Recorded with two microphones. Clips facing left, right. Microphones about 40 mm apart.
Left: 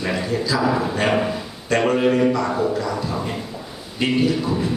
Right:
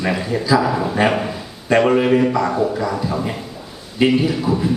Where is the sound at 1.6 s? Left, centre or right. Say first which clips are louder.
Right 4 dB; centre.